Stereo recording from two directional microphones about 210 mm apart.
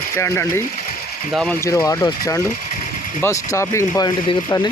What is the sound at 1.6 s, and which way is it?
Speech, 15° left (ahead or behind).